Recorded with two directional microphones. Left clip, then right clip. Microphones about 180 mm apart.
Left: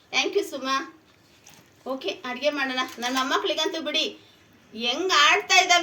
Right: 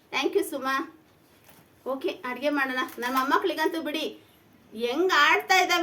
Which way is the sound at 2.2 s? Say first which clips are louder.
Left 2 dB; 20° right (ahead or behind).